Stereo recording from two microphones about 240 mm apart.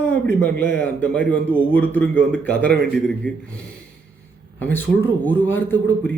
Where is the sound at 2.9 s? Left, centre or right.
Centre.